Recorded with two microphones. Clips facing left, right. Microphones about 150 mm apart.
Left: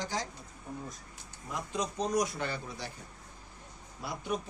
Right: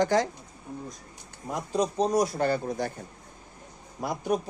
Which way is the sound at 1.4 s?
40° right (ahead or behind).